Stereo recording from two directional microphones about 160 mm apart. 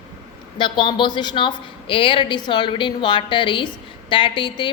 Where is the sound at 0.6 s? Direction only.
30° left (ahead or behind).